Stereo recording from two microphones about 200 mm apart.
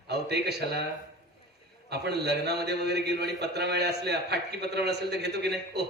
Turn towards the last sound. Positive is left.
turn(degrees=-55)  # may be behind; listen again after turning